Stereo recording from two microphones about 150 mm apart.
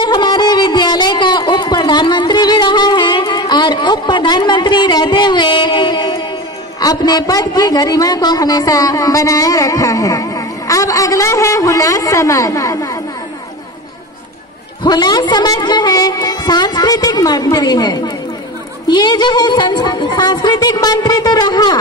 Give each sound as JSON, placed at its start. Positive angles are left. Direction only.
{"t": 0.0, "sound": "a sound", "side_deg": 30}
{"t": 6.8, "sound": "a man's voice", "side_deg": 25}
{"t": 14.8, "sound": "a man's voice", "side_deg": 25}